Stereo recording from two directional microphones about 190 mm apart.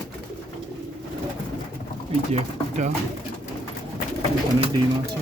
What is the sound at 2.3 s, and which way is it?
Speech, 40° right (ahead or behind).